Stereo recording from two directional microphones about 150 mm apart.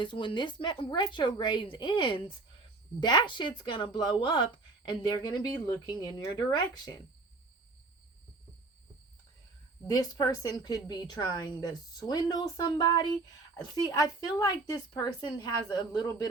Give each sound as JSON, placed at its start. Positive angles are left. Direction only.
{"t": 0.0, "sound": "a woman's voice", "side_deg": 35}
{"t": 9.8, "sound": "a woman's voice", "side_deg": 25}